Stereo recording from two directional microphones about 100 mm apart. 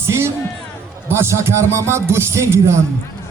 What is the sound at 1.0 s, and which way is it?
A man's voice, 25° right (ahead or behind).